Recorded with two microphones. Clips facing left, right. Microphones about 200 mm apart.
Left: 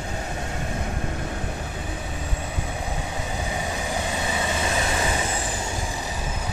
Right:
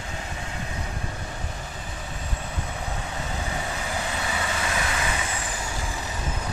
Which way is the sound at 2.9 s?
15° left (ahead or behind).